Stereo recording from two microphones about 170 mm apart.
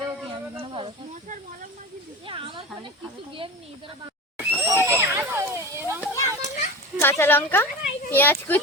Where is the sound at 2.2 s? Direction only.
30° right (ahead or behind).